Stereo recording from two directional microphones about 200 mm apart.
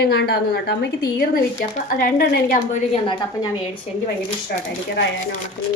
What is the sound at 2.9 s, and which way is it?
Speech, 25° left (ahead or behind).